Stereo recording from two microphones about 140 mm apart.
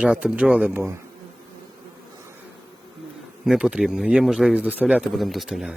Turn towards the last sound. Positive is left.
turn(degrees=-5)  # may be behind; listen again after turning